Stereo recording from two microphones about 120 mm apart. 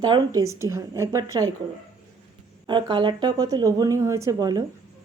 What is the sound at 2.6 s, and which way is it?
Speech, 40° right (ahead or behind).